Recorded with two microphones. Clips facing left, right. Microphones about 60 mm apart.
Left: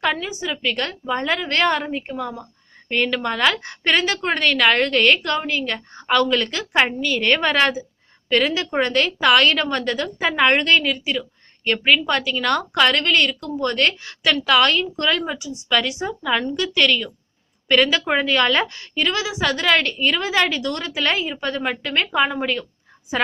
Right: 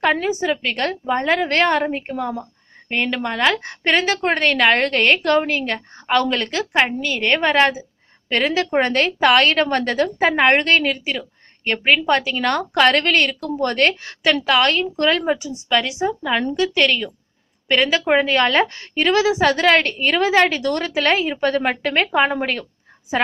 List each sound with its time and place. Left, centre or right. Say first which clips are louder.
0.0 s a woman's voice: right 5 dB; right
6.7 s a woman's voice: even; centre
7.1 s a woman's voice: right 1 dB; centre
8.3 s a woman's voice: right 1 dB; right
15.7 s a woman's voice: right 2 dB; centre